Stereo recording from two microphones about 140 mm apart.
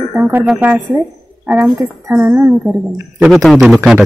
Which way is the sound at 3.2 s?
Centre (ahead or behind).